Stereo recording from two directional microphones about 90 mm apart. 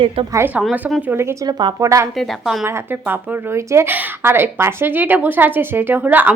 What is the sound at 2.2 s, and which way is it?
Speech, centre (ahead or behind).